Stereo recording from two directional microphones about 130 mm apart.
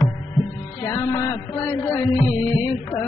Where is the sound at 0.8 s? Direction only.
25° left (ahead or behind).